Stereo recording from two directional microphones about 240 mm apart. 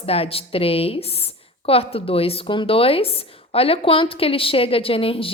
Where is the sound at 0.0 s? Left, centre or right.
Left.